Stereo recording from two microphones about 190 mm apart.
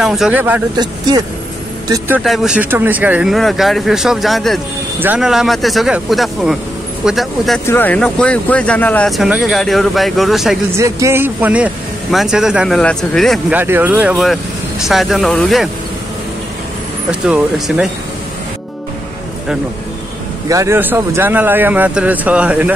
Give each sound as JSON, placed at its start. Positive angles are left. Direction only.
{"t": 0.0, "sound": "speech", "side_deg": 0}
{"t": 0.7, "sound": "speech", "side_deg": -20}
{"t": 1.9, "sound": "speech", "side_deg": -10}
{"t": 7.6, "sound": "speech", "side_deg": 10}
{"t": 10.7, "sound": "speech", "side_deg": -15}
{"t": 13.6, "sound": "speech", "side_deg": -10}
{"t": 17.1, "sound": "speech", "side_deg": -5}
{"t": 20.4, "sound": "speech", "side_deg": -15}